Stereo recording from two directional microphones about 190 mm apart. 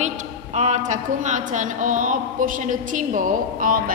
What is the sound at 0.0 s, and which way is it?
A woman's voice, 35° right (ahead or behind).